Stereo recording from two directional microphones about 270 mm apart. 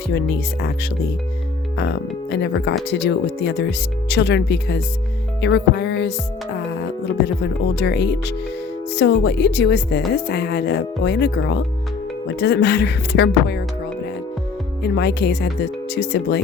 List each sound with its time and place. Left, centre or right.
0.1 s speech: left
7.8 s speech: left
14.8 s speech: left